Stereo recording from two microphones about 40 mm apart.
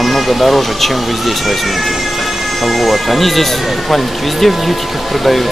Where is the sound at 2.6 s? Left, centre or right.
Centre.